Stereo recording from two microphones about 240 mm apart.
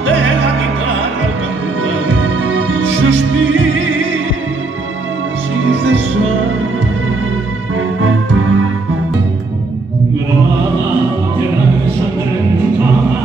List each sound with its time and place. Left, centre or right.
0.0 s music: right
2.0 s music: right
5.7 s music: right
8.0 s music: right